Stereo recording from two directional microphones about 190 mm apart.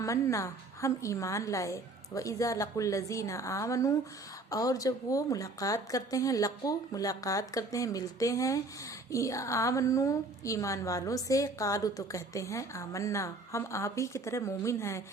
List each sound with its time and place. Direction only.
0.0 s a woman's voice: 15° left (ahead or behind)